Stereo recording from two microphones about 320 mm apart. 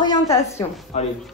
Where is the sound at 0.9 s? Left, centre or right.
Left.